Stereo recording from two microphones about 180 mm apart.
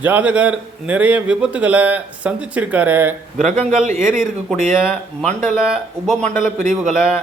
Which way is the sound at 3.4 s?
40° right (ahead or behind).